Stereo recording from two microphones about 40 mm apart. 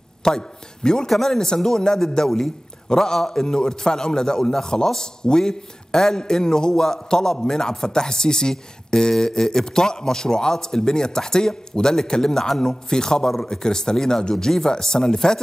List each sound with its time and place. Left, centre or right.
0.2 s a man's voice: centre